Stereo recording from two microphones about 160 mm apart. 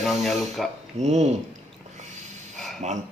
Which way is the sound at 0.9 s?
45° right (ahead or behind).